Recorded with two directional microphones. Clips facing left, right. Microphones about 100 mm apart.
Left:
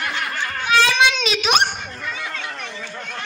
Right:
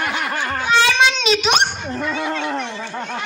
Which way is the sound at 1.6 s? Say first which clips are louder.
Right 4 dB; 25° right (ahead or behind).